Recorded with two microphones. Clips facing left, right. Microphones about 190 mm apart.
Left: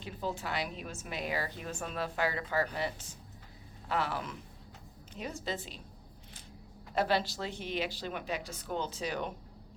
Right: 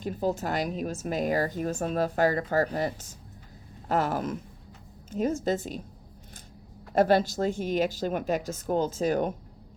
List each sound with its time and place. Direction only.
0.0 s a woman's voice: 45° right (ahead or behind)
6.9 s a woman's voice: 45° right (ahead or behind)